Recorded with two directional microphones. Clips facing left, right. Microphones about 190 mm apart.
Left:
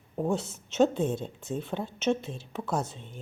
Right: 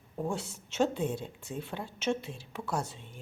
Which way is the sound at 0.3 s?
20° left (ahead or behind).